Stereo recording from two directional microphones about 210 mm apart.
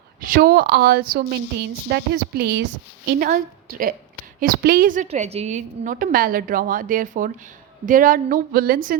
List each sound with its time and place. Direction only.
0.2 s a woman's voice: 45° right (ahead or behind)